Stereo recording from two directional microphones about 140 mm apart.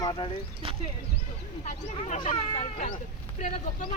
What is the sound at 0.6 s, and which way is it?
Speech, 45° right (ahead or behind).